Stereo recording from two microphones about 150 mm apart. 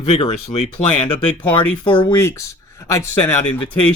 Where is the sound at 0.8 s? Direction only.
10° left (ahead or behind).